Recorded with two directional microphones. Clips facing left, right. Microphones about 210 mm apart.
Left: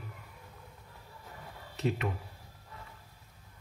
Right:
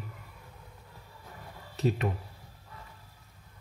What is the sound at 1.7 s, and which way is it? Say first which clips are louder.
Speech: right 3 dB; 35° right (ahead or behind).